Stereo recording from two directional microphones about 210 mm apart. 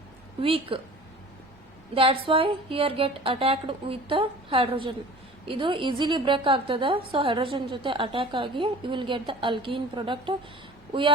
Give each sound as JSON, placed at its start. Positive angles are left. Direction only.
{"t": 0.4, "sound": "a woman's voice", "side_deg": -25}
{"t": 2.0, "sound": "a woman's voice", "side_deg": -25}